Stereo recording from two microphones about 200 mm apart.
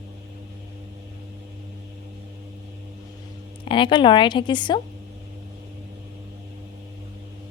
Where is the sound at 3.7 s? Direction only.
25° left (ahead or behind).